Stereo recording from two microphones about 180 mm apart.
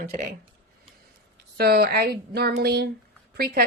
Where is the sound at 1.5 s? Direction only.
60° right (ahead or behind).